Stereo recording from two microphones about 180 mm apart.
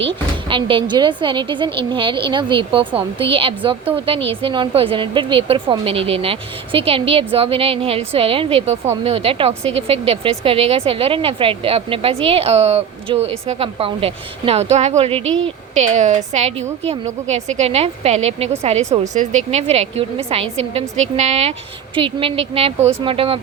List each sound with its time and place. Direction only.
0.4 s a woman's voice: 30° right (ahead or behind)
15.2 s a woman's voice: 90° right
15.4 s speech: 40° right (ahead or behind)